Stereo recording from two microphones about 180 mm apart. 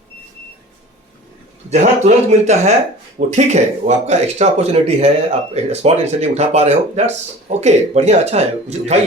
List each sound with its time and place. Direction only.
1.7 s speech: 40° right (ahead or behind)